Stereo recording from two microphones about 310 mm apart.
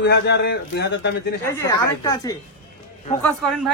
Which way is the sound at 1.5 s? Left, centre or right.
Centre.